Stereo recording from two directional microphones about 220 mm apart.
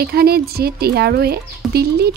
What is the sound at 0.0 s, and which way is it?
Speech, 45° right (ahead or behind).